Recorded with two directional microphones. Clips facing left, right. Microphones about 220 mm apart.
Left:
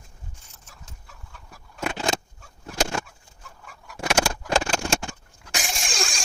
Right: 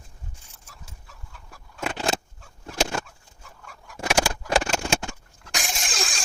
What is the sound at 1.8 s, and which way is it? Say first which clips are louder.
Vehicle: even; 5° right (ahead or behind).